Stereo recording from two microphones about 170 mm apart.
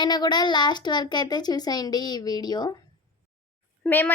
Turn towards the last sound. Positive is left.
turn(degrees=10)  # may be behind; listen again after turning